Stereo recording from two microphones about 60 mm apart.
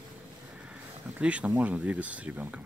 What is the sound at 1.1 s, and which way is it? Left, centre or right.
Speech, right.